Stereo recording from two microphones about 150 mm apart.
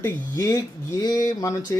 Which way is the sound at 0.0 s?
20° left (ahead or behind).